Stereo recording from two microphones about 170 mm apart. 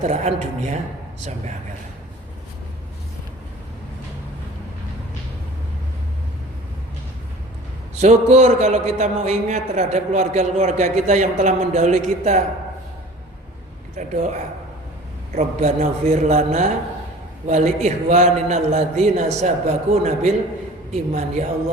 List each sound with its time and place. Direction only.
0.0 s a man's voice: 40° right (ahead or behind)
7.9 s a man's voice: 40° right (ahead or behind)
13.9 s a man's voice: 45° right (ahead or behind)
15.4 s a man's voice: 40° right (ahead or behind)